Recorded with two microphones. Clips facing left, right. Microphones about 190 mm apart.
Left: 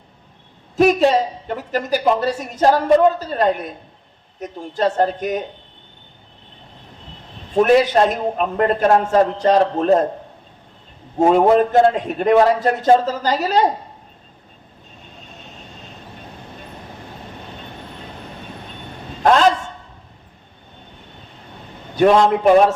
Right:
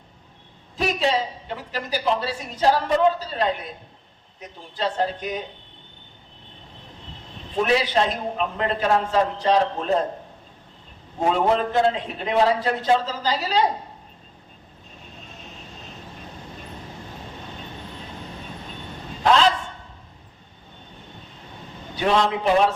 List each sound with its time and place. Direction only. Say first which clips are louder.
0.8 s a woman's voice: left 9 dB; 50° left (ahead or behind)
7.5 s a woman's voice: left 8 dB; 50° left (ahead or behind)
11.2 s a woman's voice: left 8 dB; 45° left (ahead or behind)
19.2 s a sound: left 4 dB; 50° left (ahead or behind)
21.9 s a woman's voice: left 8 dB; 50° left (ahead or behind)